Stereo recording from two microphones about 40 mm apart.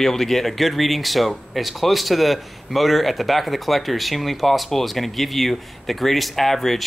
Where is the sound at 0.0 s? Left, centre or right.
Centre.